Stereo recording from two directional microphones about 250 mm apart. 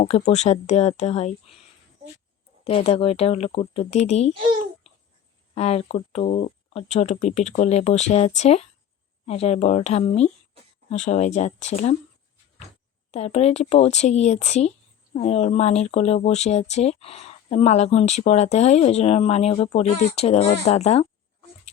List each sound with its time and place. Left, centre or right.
0.3 s speech: left
5.5 s speech: left
13.1 s speech: left